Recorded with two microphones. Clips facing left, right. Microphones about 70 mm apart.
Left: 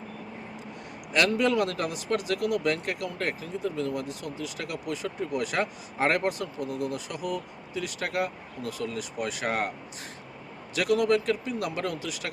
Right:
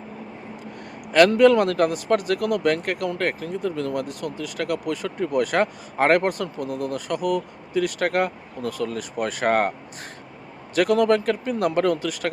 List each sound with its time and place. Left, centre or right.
1.1 s speech: right
10.8 s speech: right